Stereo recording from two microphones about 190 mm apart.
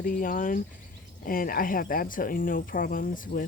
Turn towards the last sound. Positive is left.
turn(degrees=45)  # may be behind; listen again after turning